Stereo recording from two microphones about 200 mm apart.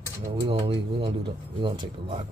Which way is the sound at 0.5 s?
25° right (ahead or behind).